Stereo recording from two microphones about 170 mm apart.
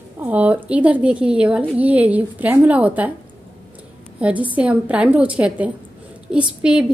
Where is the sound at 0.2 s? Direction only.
10° right (ahead or behind).